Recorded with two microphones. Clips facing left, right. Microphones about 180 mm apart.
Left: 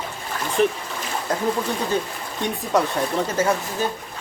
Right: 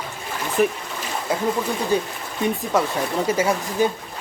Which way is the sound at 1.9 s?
15° right (ahead or behind).